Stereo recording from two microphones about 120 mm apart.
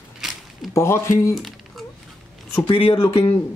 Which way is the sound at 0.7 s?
20° left (ahead or behind).